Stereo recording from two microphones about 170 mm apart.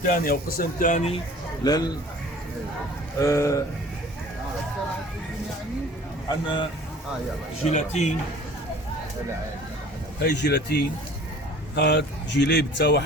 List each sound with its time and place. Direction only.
0.1 s speech: 55° left (ahead or behind); by 1.2 s 40° left (ahead or behind)
1.6 s speech: 25° left (ahead or behind)
3.2 s speech: 20° left (ahead or behind)
6.2 s speech: 30° left (ahead or behind)
7.6 s speech: 45° left (ahead or behind)
10.2 s speech: 85° left